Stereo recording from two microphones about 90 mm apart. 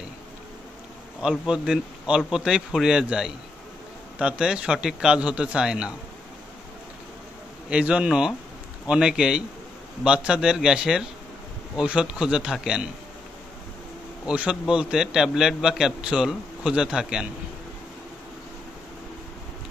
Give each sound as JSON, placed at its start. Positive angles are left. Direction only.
{"t": 1.4, "sound": "a man's voice", "side_deg": -10}
{"t": 7.7, "sound": "a man's voice", "side_deg": -10}
{"t": 14.2, "sound": "a man's voice", "side_deg": -10}